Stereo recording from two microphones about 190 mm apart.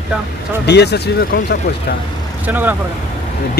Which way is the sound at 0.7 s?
60° left (ahead or behind).